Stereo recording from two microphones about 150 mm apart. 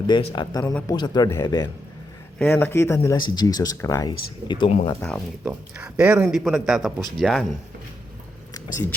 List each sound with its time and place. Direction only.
0.1 s speech: 30° left (ahead or behind)
0.6 s speech: 10° left (ahead or behind)
0.9 s speech: 30° left (ahead or behind)
2.4 s speech: 15° left (ahead or behind)
3.2 s speech: 30° left (ahead or behind)
4.9 s speech: 5° left (ahead or behind)
5.5 s speech: 10° right (ahead or behind)